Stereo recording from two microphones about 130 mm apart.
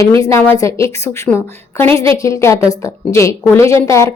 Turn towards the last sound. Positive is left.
turn(degrees=20)  # may be behind; listen again after turning